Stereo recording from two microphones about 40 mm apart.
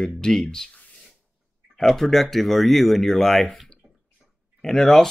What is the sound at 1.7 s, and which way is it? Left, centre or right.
Speech, centre.